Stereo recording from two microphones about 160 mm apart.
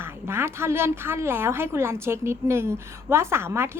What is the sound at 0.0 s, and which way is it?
A woman's voice, 15° right (ahead or behind).